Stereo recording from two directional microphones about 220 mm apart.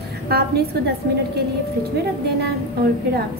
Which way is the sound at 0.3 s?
45° right (ahead or behind).